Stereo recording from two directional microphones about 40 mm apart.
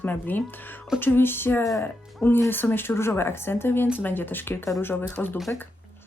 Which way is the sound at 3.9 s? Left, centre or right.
Left.